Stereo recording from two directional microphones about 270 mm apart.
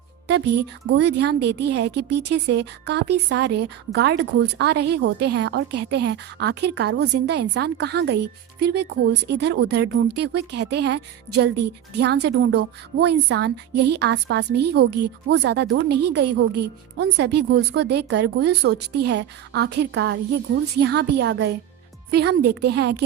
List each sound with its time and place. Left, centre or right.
0.3 s a woman's voice: right